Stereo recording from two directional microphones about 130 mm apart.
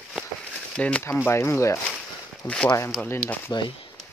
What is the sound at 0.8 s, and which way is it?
Speech, 10° left (ahead or behind).